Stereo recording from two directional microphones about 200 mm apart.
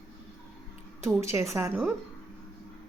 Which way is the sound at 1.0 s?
15° right (ahead or behind).